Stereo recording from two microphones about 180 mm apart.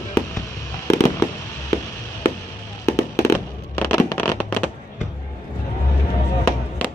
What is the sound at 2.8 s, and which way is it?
Fireworks, 15° left (ahead or behind).